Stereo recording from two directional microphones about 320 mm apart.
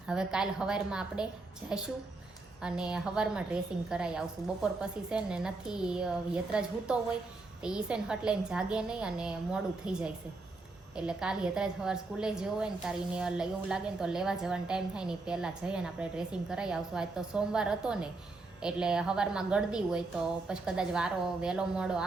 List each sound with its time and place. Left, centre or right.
0.1 s a woman's voice: centre